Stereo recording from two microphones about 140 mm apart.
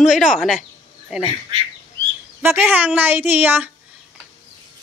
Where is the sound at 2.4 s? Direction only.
15° right (ahead or behind).